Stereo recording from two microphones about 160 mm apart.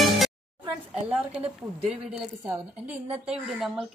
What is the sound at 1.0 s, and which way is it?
A woman's voice, 5° right (ahead or behind).